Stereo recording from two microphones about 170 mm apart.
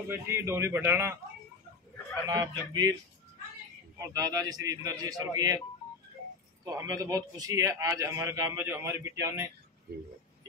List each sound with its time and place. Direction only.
0.1 s a man's voice: 15° right (ahead or behind)
2.2 s speech: 20° right (ahead or behind)
4.1 s speech: 20° right (ahead or behind)
6.6 s a man's voice: 20° right (ahead or behind)